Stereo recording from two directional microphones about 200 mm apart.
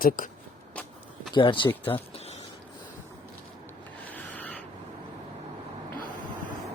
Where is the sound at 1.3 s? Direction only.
25° left (ahead or behind).